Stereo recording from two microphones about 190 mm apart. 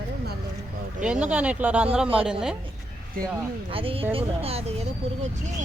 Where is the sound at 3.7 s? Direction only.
30° right (ahead or behind).